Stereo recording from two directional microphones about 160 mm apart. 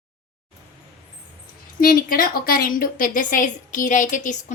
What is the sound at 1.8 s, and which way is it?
A woman's voice, 65° left (ahead or behind).